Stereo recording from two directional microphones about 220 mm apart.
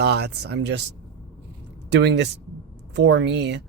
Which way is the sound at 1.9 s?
50° right (ahead or behind).